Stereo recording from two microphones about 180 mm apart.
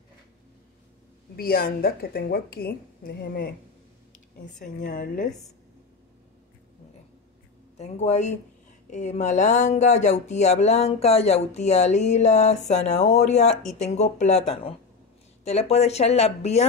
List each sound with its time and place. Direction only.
1.3 s a woman's voice: 55° left (ahead or behind)
7.7 s speech: 40° left (ahead or behind)